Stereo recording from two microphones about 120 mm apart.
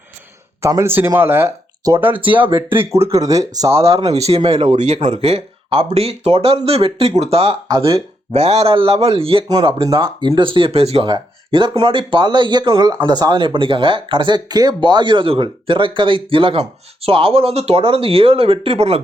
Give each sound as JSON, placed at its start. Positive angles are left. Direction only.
{"t": 0.6, "sound": "speech", "side_deg": -25}
{"t": 3.8, "sound": "speech", "side_deg": -55}
{"t": 4.4, "sound": "speech", "side_deg": -45}
{"t": 5.0, "sound": "speech", "side_deg": -60}
{"t": 11.1, "sound": "speech", "side_deg": -45}